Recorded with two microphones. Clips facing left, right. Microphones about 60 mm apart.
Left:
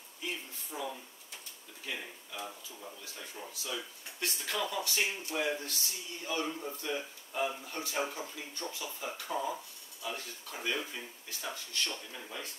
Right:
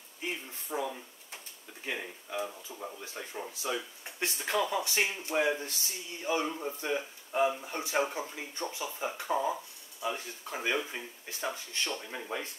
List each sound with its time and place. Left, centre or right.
0.2 s speech: right
1.9 s speech: right